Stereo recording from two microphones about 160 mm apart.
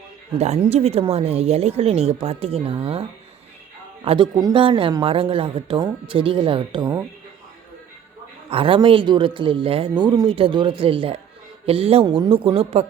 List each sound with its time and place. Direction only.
0.3 s speech: 40° right (ahead or behind); by 7.0 s 25° right (ahead or behind)
8.4 s speech: 35° right (ahead or behind)